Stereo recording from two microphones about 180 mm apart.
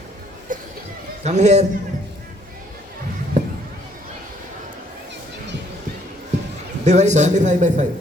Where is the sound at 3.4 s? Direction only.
40° right (ahead or behind).